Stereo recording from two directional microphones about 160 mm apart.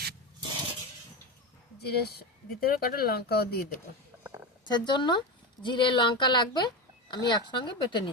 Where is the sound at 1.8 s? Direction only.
85° left.